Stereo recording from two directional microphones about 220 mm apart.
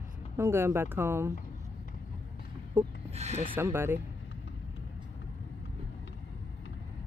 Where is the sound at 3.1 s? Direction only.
30° right (ahead or behind).